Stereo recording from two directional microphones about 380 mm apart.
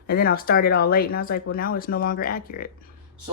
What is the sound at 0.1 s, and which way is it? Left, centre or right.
Speech, left.